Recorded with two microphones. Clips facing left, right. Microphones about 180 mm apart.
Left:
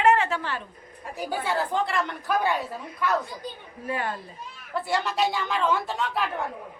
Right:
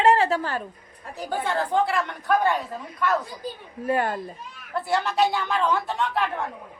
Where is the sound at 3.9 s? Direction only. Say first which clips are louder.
Right 6 dB; 45° right (ahead or behind).